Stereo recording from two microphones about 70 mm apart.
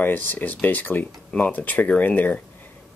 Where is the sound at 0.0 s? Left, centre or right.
Left.